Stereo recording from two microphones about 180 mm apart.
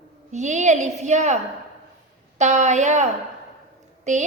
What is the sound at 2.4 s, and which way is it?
A woman's voice, 40° right (ahead or behind).